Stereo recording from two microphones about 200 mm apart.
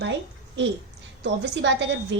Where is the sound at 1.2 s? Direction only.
60° right (ahead or behind).